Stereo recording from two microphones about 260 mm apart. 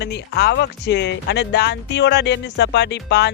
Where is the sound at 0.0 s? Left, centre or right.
Left.